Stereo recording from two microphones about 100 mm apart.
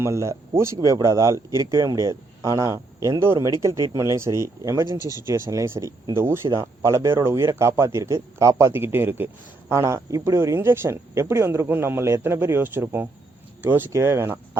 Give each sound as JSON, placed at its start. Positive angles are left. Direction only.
{"t": 0.0, "sound": "speech", "side_deg": -30}
{"t": 8.7, "sound": "speech", "side_deg": -20}